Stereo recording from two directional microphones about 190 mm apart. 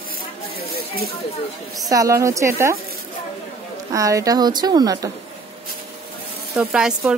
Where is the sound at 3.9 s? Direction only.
15° right (ahead or behind).